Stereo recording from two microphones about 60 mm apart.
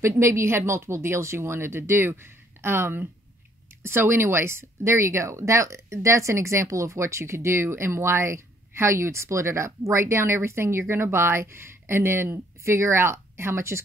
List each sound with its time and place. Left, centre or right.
0.0 s speech: right